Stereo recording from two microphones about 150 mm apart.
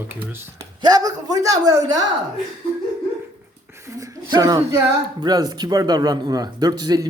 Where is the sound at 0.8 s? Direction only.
25° right (ahead or behind).